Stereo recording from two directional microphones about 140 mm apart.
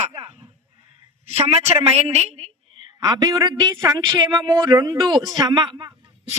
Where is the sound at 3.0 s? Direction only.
25° right (ahead or behind).